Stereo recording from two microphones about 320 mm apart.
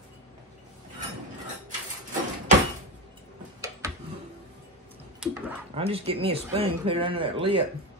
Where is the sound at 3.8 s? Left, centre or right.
Centre.